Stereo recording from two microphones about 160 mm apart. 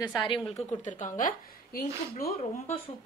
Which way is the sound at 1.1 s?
55° left (ahead or behind).